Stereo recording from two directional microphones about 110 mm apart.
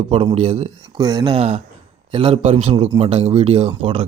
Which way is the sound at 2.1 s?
55° right (ahead or behind).